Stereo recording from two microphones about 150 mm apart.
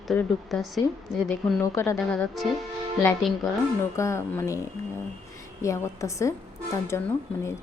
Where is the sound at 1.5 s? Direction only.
20° left (ahead or behind).